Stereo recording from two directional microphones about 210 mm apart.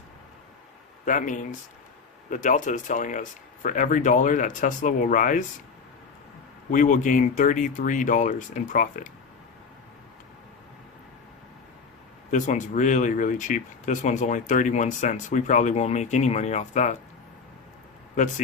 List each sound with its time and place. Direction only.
1.0 s speech: 40° left (ahead or behind)
6.7 s speech: 40° left (ahead or behind)
12.3 s speech: 35° left (ahead or behind)